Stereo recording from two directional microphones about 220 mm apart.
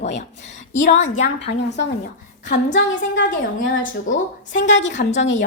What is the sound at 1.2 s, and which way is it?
Speech, 50° left (ahead or behind).